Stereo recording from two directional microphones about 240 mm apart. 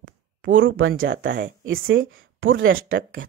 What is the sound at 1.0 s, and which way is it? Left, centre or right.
Speech, right.